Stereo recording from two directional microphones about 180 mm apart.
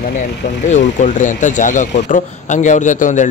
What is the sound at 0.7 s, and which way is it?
Speech, 40° left (ahead or behind).